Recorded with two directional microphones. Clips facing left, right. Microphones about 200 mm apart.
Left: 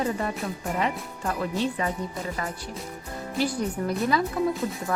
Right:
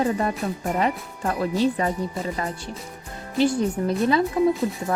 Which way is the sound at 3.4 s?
25° right (ahead or behind).